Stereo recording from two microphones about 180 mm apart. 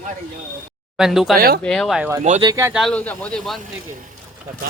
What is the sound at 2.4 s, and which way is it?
Speech, 15° right (ahead or behind).